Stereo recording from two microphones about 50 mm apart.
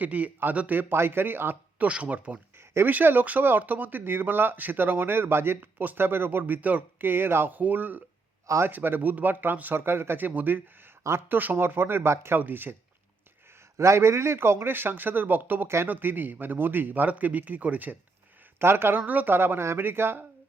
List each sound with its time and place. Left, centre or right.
0.0 s speech: right
0.8 s speech: right
1.9 s speech: right
2.8 s speech: right
5.5 s speech: right
6.0 s speech: right
7.5 s speech: right
12.4 s speech: right
13.7 s speech: right
18.6 s speech: right
18.9 s speech: right